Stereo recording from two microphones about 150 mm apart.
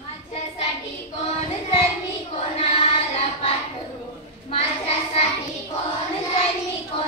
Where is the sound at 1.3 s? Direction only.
45° left (ahead or behind).